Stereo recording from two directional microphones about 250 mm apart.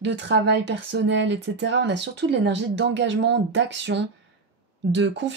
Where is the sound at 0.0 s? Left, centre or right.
Right.